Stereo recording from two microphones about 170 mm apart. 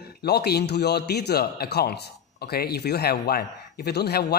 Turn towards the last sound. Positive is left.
turn(degrees=70)  # may be behind; listen again after turning